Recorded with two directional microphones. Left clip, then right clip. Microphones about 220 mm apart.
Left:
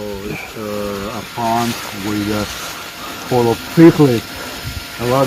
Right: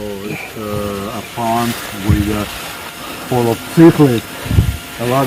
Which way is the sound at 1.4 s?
10° right (ahead or behind).